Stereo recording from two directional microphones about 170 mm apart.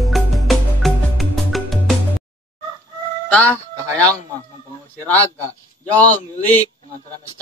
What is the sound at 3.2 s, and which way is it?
Music, 10° left (ahead or behind).